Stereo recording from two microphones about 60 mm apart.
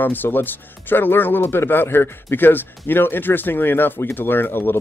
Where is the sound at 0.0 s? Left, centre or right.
Left.